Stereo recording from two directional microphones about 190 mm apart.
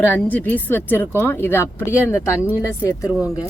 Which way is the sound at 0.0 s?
10° left (ahead or behind).